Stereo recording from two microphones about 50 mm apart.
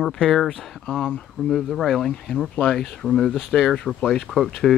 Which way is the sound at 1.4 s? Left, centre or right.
Centre.